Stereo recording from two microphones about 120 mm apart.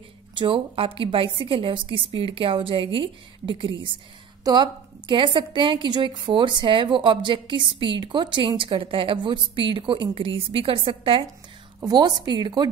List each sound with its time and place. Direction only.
0.3 s a woman's voice: 45° right (ahead or behind)